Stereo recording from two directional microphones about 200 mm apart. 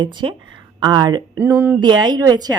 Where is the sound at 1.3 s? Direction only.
10° right (ahead or behind).